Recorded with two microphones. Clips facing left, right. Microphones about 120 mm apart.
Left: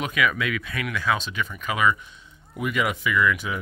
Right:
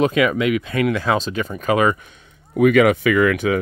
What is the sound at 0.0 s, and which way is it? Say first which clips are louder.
Speech: right 8 dB; 30° right (ahead or behind).